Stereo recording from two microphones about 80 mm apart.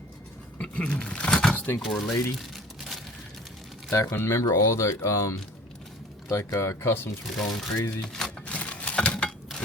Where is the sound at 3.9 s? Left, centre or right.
Left.